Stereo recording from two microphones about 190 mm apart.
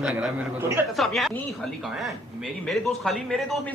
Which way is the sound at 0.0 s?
5° right (ahead or behind).